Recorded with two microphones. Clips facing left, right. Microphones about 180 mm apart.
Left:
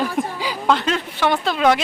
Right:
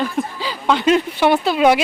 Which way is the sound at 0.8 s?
15° right (ahead or behind).